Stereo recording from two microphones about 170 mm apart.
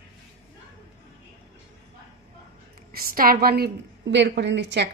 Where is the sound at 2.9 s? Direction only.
55° right (ahead or behind); by 4.9 s 90° right.